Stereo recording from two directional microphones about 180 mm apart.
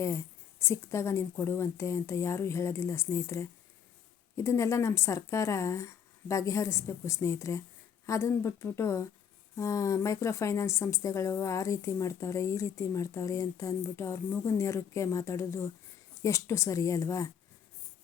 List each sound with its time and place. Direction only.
0.0 s a woman's voice: 15° left (ahead or behind)